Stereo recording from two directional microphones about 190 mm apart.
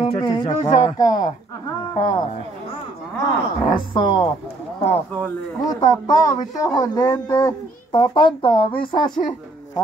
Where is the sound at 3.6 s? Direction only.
25° left (ahead or behind).